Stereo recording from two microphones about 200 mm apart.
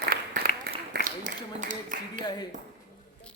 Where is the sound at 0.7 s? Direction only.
50° right (ahead or behind).